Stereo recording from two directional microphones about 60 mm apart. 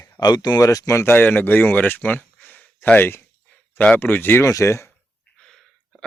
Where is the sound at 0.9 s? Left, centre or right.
Left.